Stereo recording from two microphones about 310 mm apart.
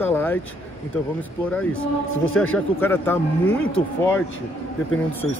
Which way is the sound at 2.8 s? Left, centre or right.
Centre.